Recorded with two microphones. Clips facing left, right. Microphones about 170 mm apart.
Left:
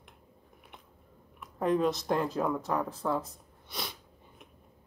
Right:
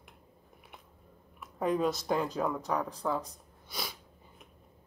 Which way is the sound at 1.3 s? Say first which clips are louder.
Left 2 dB; centre (ahead or behind).